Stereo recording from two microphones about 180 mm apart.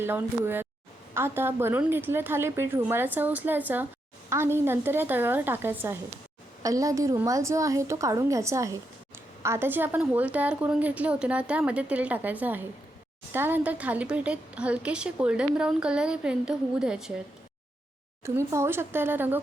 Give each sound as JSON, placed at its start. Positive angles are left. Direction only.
{"t": 0.0, "sound": "a woman's voice", "side_deg": -10}
{"t": 18.3, "sound": "a woman's voice", "side_deg": -15}